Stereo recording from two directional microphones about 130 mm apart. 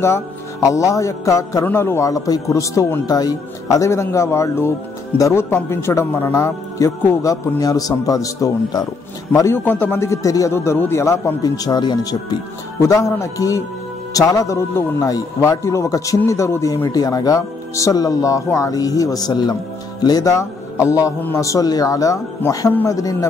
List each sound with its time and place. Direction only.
0.0 s speech: 25° left (ahead or behind)